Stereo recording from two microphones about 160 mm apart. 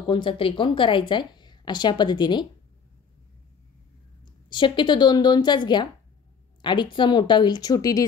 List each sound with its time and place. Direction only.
0.1 s a woman's voice: 35° left (ahead or behind)
4.5 s a woman's voice: 30° left (ahead or behind)